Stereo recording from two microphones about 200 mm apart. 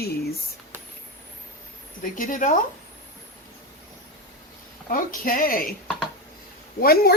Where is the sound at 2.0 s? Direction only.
40° left (ahead or behind).